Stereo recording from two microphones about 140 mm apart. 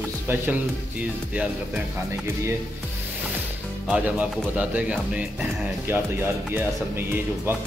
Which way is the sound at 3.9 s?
10° right (ahead or behind).